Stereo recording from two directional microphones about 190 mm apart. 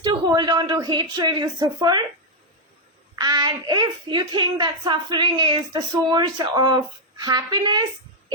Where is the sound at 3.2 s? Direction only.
20° right (ahead or behind).